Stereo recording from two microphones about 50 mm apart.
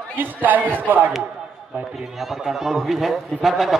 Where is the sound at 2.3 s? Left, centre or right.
Centre.